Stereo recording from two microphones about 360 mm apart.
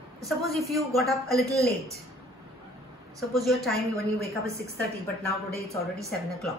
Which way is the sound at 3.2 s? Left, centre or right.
Centre.